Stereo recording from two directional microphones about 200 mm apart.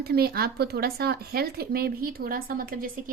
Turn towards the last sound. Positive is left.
turn(degrees=-45)  # may be behind; listen again after turning